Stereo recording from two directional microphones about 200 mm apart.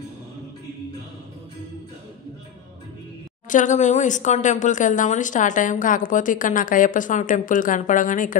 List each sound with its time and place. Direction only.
3.4 s a woman's voice: 40° left (ahead or behind)